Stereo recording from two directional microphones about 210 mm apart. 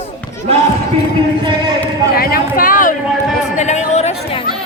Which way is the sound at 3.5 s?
35° left (ahead or behind).